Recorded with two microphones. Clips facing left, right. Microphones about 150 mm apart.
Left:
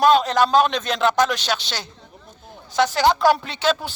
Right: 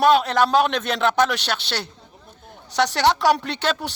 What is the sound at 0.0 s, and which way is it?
A man's voice, 65° right (ahead or behind).